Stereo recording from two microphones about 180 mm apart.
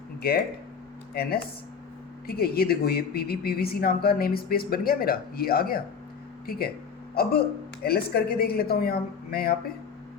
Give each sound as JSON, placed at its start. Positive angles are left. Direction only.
{"t": 0.2, "sound": "speech", "side_deg": 60}